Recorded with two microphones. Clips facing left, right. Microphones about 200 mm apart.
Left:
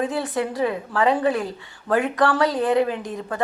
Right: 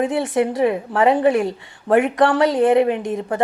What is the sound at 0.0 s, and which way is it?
A woman's voice, 20° right (ahead or behind).